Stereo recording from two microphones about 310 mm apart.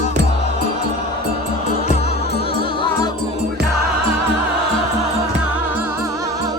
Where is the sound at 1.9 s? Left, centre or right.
Centre.